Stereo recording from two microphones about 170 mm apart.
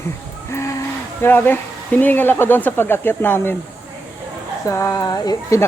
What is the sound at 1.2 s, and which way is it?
Speech, 10° left (ahead or behind).